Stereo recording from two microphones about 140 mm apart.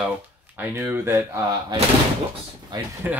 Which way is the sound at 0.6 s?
15° right (ahead or behind).